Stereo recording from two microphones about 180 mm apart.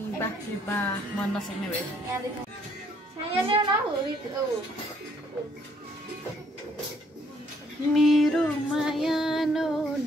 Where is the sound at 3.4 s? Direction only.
30° right (ahead or behind).